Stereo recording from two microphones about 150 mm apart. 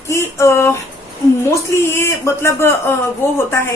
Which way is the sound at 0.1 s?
20° left (ahead or behind).